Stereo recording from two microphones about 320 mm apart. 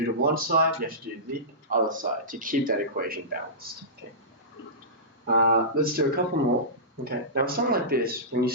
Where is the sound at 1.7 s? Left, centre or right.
Right.